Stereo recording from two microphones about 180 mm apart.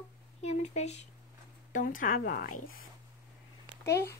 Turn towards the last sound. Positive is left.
turn(degrees=15)  # may be behind; listen again after turning